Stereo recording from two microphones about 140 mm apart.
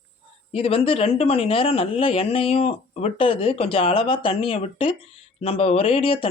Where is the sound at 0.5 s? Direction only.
40° left (ahead or behind).